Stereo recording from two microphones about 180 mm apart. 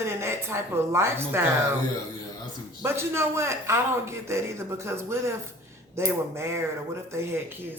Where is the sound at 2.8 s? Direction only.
15° right (ahead or behind).